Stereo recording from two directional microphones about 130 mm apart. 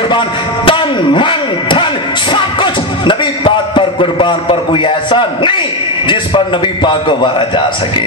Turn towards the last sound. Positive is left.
turn(degrees=40)  # may be behind; listen again after turning